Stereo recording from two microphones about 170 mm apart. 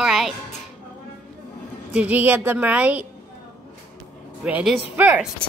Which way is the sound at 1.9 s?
10° right (ahead or behind).